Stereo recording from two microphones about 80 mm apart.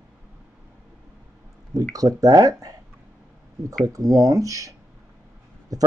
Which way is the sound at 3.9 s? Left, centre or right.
Right.